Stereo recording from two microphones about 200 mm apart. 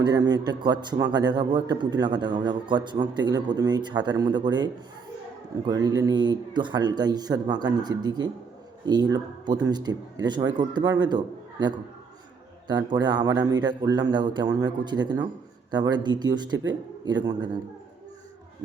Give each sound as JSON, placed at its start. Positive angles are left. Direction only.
{"t": 0.0, "sound": "a man's voice", "side_deg": -20}
{"t": 12.6, "sound": "a man's voice", "side_deg": -20}